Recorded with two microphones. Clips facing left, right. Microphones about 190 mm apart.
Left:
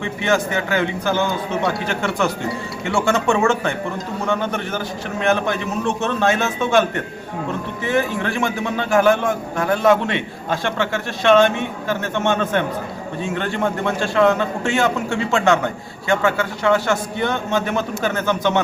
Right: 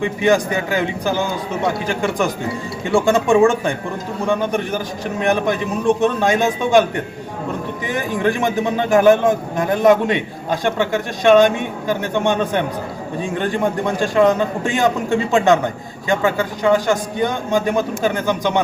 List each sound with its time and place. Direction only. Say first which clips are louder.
0.0 s a man's voice: right 4 dB; 15° right (ahead or behind)
7.9 s a man's voice: right 1 dB; 15° right (ahead or behind)